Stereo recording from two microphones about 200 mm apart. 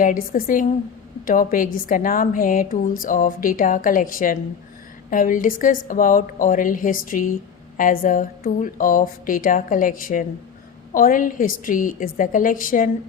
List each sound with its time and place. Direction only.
0.0 s a woman's voice: 45° left (ahead or behind)